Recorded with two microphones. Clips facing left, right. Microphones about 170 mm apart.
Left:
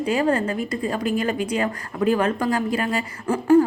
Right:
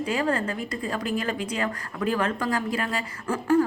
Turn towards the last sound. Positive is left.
turn(degrees=25)  # may be behind; listen again after turning